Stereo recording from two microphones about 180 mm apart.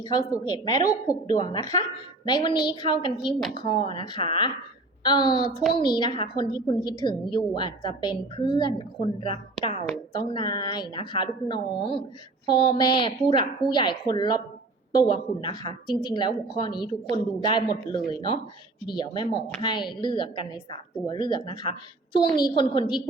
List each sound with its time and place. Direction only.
0.0 s a woman's voice: 20° left (ahead or behind)